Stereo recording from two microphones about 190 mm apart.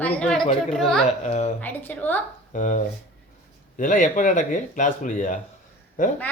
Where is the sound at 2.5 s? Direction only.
45° left (ahead or behind).